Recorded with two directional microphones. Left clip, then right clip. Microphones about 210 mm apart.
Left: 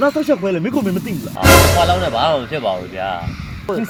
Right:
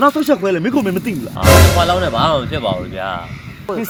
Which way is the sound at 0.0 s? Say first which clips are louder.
Right 2 dB; 55° right (ahead or behind).